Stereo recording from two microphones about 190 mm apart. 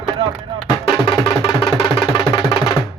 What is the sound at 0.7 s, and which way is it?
Music, 20° left (ahead or behind).